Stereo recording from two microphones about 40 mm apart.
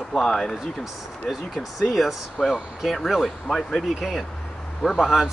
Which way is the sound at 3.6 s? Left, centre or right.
Centre.